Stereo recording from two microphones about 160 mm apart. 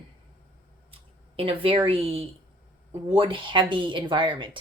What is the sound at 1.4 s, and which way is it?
Speech, 35° right (ahead or behind).